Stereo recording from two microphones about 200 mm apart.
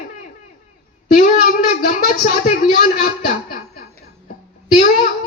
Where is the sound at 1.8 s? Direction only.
40° left (ahead or behind).